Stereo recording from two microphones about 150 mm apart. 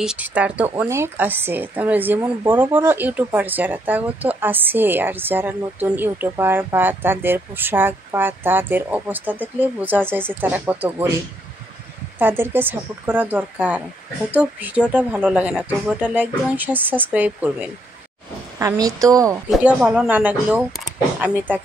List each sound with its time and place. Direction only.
0.0 s a woman's voice: 5° right (ahead or behind)
12.2 s a woman's voice: 15° right (ahead or behind)
18.6 s a woman's voice: 25° right (ahead or behind)
19.5 s a woman's voice: 10° right (ahead or behind)